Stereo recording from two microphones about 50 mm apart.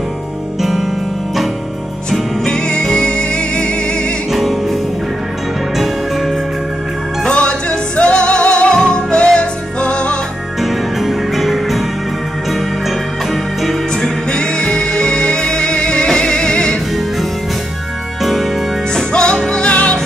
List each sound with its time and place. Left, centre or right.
0.6 s music: centre
2.4 s music: centre
4.3 s music: centre
7.2 s music: left
10.6 s music: centre
13.3 s music: centre
14.0 s music: centre
18.2 s music: centre
18.9 s music: centre
19.6 s music: left